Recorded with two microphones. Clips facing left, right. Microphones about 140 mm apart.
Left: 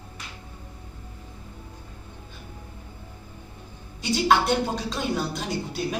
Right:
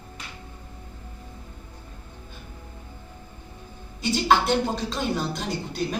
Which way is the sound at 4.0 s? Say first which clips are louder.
Even; centre (ahead or behind).